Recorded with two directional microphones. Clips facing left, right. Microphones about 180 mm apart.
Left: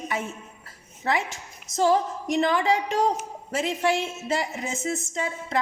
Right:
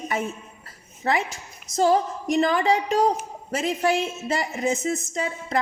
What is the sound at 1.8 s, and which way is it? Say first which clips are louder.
A woman's voice: right 1 dB; 40° right (ahead or behind).